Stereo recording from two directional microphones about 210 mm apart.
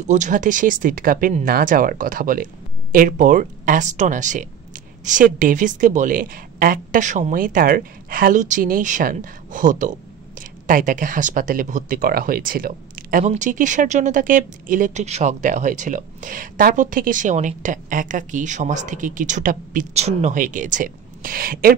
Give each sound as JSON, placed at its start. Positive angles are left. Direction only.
{"t": 0.0, "sound": "speech", "side_deg": -35}